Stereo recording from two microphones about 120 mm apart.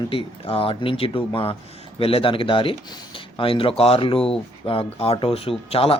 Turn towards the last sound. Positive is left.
turn(degrees=55)  # may be behind; listen again after turning